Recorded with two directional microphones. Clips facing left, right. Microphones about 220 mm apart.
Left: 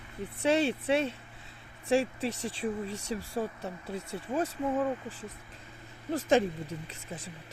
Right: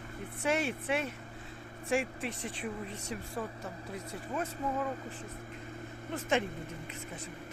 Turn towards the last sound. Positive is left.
turn(degrees=35)  # may be behind; listen again after turning